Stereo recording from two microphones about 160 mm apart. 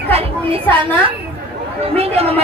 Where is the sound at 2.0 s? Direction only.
40° right (ahead or behind).